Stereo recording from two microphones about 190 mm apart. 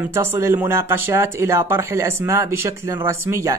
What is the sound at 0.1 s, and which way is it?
Speech, 15° right (ahead or behind).